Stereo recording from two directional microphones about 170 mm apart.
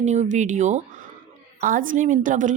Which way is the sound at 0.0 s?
45° right (ahead or behind).